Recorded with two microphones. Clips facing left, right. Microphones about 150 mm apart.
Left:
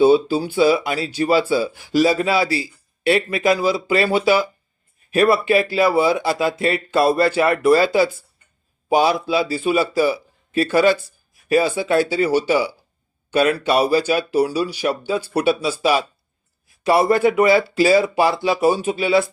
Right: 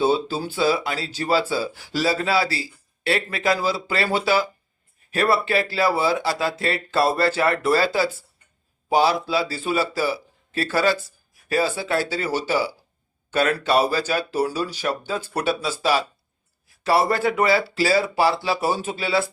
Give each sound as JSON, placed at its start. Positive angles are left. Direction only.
{"t": 0.0, "sound": "speech", "side_deg": 15}